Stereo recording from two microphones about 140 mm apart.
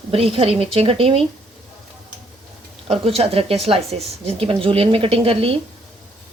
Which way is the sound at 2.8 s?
45° right (ahead or behind).